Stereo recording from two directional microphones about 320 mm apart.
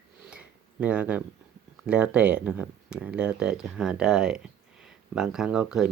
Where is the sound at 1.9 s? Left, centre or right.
Centre.